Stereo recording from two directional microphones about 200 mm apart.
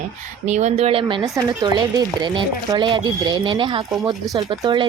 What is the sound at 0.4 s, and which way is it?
Speech, 35° right (ahead or behind).